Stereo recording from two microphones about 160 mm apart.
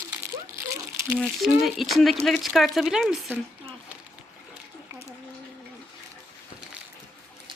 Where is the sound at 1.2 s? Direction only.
Centre (ahead or behind).